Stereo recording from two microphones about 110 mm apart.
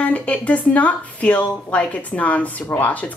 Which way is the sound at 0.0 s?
15° left (ahead or behind).